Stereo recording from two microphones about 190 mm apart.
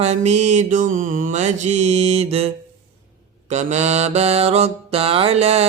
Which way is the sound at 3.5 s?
40° right (ahead or behind).